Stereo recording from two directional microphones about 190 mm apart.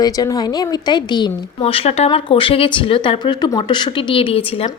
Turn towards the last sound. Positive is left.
turn(degrees=30)  # may be behind; listen again after turning